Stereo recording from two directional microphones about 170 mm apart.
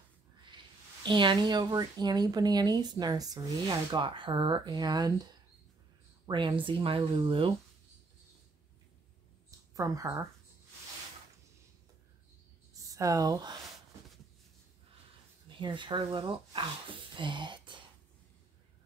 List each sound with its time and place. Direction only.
1.0 s speech: 30° right (ahead or behind)
9.8 s speech: 20° right (ahead or behind)
12.9 s speech: 20° right (ahead or behind)
15.4 s speech: 30° right (ahead or behind)